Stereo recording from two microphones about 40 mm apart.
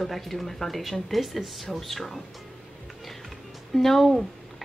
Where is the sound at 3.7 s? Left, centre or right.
Centre.